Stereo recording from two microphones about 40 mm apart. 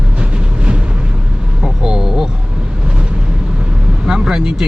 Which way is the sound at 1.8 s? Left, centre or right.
Centre.